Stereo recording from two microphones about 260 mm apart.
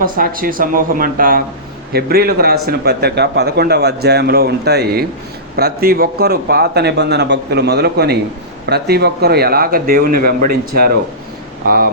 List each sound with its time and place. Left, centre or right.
0.0 s a man's voice: right